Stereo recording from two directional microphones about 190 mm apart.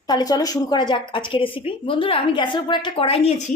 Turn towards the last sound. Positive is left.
turn(degrees=35)  # may be behind; listen again after turning